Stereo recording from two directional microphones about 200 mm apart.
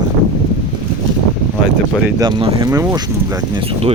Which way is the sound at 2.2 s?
25° right (ahead or behind).